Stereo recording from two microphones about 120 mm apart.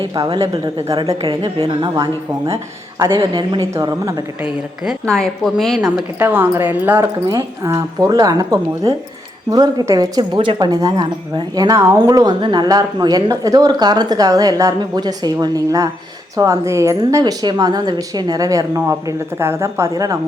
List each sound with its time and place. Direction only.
0.3 s speech: 50° right (ahead or behind)
3.0 s speech: 40° right (ahead or behind)
5.0 s a woman's voice: 5° left (ahead or behind)
6.1 s speech: 15° right (ahead or behind); by 10.7 s 45° right (ahead or behind)
10.7 s a woman's voice: 35° right (ahead or behind)
12.2 s a woman's voice: 40° right (ahead or behind)